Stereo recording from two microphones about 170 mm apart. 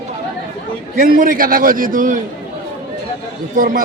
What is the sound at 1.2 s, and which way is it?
A man's voice, 55° right (ahead or behind).